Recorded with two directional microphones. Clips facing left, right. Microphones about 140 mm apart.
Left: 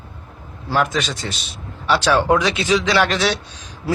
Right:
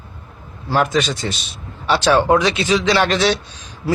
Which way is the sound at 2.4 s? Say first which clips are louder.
Right 2 dB; 10° left (ahead or behind).